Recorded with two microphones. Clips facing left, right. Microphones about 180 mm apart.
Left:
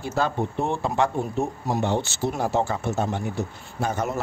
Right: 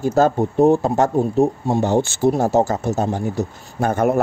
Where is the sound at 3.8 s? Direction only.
55° right (ahead or behind).